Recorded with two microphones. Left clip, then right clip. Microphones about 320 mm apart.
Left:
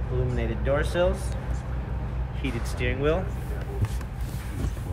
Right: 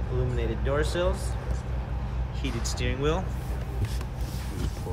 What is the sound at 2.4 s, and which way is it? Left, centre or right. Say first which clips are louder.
Speech: left 2 dB; centre.